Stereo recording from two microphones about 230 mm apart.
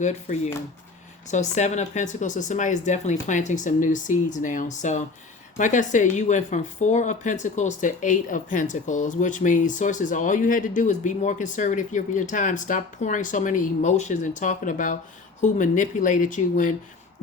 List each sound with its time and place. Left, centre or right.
0.0 s speech: left